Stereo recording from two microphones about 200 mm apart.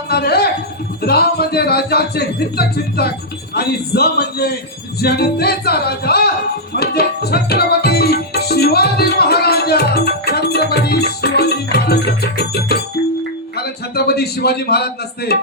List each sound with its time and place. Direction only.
0.1 s a sound: 50° left (ahead or behind)
1.0 s speech: 50° left (ahead or behind)
6.7 s music: 55° left (ahead or behind)
13.6 s speech: 50° left (ahead or behind)